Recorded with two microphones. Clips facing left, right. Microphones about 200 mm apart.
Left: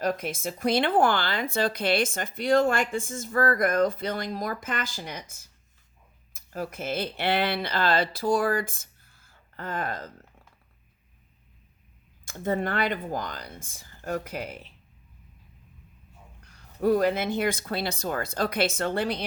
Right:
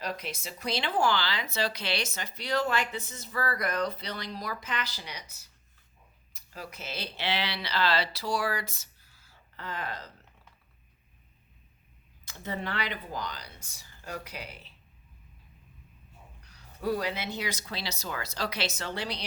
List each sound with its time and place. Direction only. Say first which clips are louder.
0.0 s speech: left 8 dB; 50° left (ahead or behind)
12.2 s speech: left 8 dB; 50° left (ahead or behind)
16.4 s speech: left 8 dB; 50° left (ahead or behind)